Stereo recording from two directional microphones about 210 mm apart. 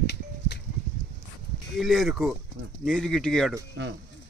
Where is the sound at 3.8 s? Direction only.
60° right (ahead or behind).